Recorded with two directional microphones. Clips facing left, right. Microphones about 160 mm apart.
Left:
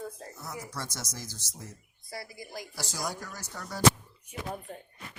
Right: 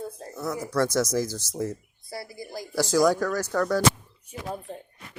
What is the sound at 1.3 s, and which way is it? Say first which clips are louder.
Speech: right 16 dB; 40° right (ahead or behind).